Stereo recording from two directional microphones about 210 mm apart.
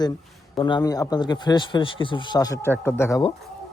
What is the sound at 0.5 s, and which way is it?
A man's voice, 20° left (ahead or behind).